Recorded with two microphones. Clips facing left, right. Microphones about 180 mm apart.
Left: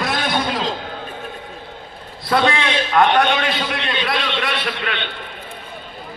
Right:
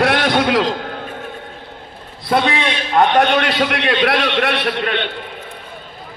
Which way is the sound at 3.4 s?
70° right (ahead or behind).